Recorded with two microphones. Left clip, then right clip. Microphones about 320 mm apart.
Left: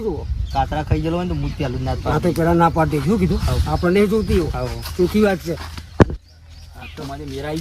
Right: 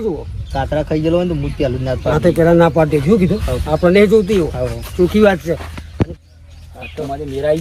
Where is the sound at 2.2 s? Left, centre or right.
Right.